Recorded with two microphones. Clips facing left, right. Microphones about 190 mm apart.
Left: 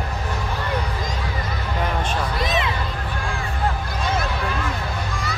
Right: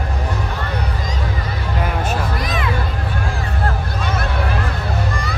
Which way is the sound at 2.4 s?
25° left (ahead or behind).